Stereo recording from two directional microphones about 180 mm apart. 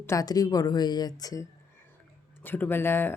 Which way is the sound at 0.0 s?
15° left (ahead or behind).